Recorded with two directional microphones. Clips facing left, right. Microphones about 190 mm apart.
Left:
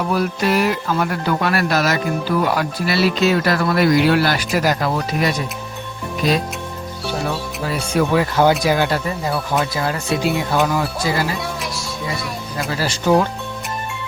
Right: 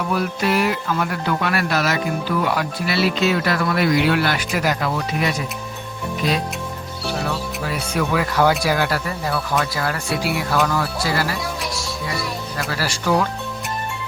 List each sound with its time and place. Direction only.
0.1 s speech: 40° left (ahead or behind)
7.3 s speech: 30° left (ahead or behind)
12.5 s speech: 20° left (ahead or behind)